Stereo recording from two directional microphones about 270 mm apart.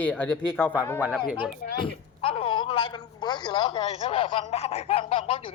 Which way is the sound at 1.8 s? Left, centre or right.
Centre.